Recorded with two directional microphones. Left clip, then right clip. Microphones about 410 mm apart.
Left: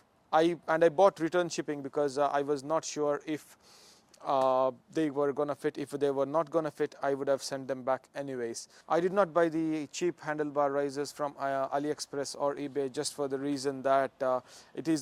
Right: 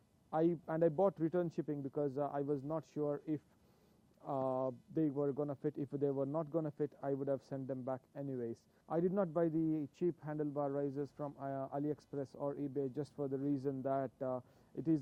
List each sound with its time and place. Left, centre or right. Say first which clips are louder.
0.3 s a man's voice: left 9 dB; centre